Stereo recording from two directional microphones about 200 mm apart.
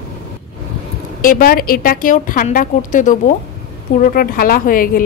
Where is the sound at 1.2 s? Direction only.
45° left (ahead or behind).